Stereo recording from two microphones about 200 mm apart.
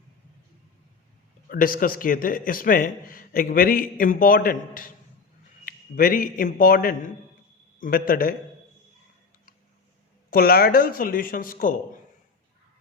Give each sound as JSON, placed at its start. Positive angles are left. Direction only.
{"t": 1.5, "sound": "a man's voice", "side_deg": 45}
{"t": 10.2, "sound": "a man's voice", "side_deg": 45}